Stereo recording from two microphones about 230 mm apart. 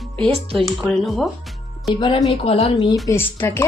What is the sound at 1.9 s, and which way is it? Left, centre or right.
Speech, centre.